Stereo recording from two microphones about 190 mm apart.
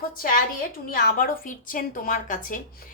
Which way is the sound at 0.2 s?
45° left (ahead or behind).